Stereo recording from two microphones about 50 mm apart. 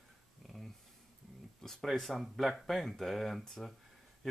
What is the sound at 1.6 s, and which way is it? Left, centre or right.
Speech, centre.